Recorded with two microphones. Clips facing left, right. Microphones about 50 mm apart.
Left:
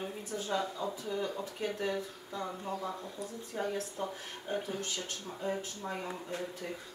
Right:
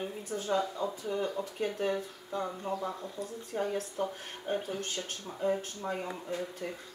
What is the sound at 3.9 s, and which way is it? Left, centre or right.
Speech, right.